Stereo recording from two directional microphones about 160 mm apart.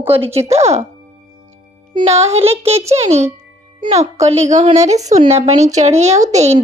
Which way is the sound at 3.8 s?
40° right (ahead or behind).